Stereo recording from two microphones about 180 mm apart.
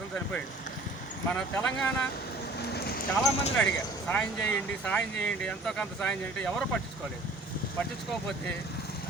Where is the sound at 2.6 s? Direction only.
65° left (ahead or behind).